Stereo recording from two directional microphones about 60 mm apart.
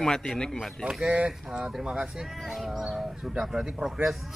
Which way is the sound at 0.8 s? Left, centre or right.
Centre.